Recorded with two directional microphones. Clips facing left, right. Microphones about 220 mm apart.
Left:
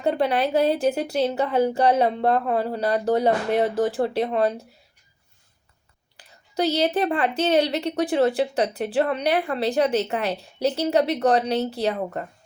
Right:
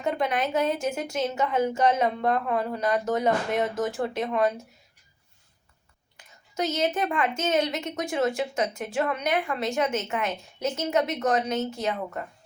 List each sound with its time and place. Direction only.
0.0 s a woman's voice: 35° left (ahead or behind)
6.1 s a woman's voice: 35° left (ahead or behind)